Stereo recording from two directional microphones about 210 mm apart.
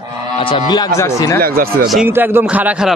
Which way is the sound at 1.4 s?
45° right (ahead or behind).